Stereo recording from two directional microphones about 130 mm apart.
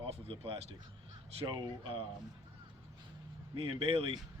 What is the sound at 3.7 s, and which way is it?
Speech, 45° right (ahead or behind).